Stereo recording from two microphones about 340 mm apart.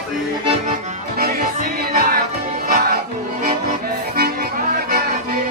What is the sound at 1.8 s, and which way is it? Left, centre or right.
Music, right.